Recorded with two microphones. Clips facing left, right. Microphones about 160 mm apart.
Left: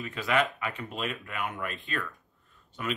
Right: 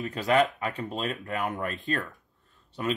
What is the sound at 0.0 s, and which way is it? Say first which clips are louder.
Speech: right 4 dB; 40° right (ahead or behind).